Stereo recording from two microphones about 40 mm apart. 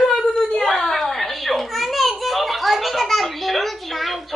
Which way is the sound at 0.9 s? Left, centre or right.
Centre.